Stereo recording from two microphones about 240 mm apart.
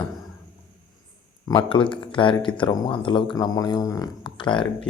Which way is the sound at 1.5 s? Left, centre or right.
Left.